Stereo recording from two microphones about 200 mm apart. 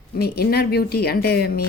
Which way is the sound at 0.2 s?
50° left (ahead or behind).